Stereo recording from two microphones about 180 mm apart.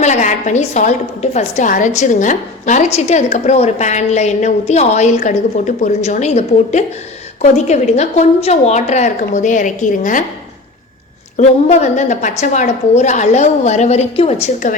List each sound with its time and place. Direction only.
0.0 s a woman's voice: 40° left (ahead or behind)
11.3 s a woman's voice: 40° left (ahead or behind)